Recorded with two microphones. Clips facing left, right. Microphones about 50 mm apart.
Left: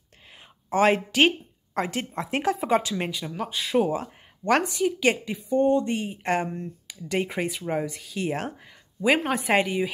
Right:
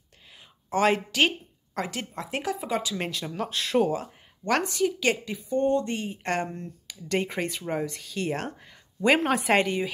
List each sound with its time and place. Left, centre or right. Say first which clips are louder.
0.7 s a woman's voice: left 2 dB; left
3.0 s a woman's voice: left 1 dB; centre
3.9 s a woman's voice: left 1 dB; left
9.0 s speech: right 1 dB; centre